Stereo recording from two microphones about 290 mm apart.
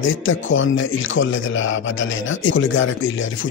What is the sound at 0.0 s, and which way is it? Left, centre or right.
A man's voice, left.